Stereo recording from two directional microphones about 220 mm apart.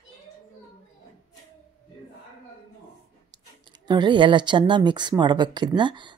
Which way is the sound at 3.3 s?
20° right (ahead or behind).